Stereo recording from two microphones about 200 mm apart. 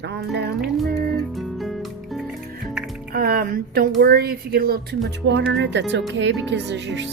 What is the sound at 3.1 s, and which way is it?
Speech, 50° right (ahead or behind).